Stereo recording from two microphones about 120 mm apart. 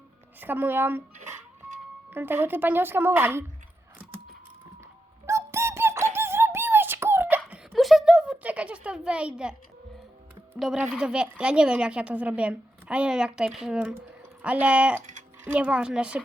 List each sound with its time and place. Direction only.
0.3 s a woman's voice: 15° right (ahead or behind)
2.0 s a woman's voice: 15° right (ahead or behind)
4.8 s music: 25° right (ahead or behind)
6.1 s a sound: 20° right (ahead or behind)
7.8 s a sound: centre (ahead or behind)
10.6 s a woman's voice: 5° right (ahead or behind)